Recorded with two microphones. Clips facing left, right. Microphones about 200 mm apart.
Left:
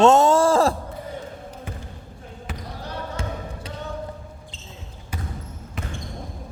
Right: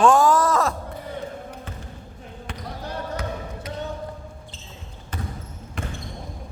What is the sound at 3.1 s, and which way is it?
Basketball bounce, 30° left (ahead or behind).